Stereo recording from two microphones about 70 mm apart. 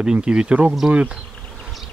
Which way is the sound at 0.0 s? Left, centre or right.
Centre.